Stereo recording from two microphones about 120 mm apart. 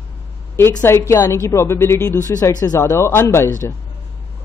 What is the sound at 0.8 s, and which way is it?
A woman's voice, 25° left (ahead or behind).